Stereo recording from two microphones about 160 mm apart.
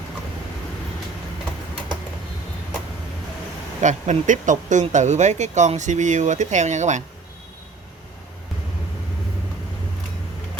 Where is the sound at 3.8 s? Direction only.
50° right (ahead or behind).